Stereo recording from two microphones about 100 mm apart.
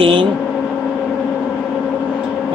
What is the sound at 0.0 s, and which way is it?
Vehicle, 55° right (ahead or behind).